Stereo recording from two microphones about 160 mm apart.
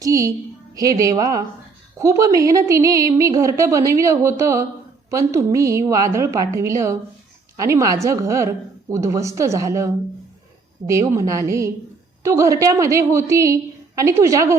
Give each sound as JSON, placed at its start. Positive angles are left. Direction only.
{"t": 0.0, "sound": "a woman's voice", "side_deg": -20}